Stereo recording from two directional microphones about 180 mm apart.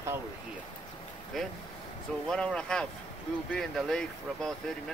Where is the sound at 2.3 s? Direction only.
5° left (ahead or behind).